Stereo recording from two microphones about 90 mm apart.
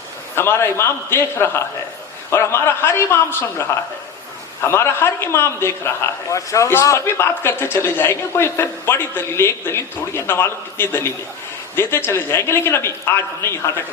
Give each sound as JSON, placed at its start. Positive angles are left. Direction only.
{"t": 0.3, "sound": "a man's voice", "side_deg": 25}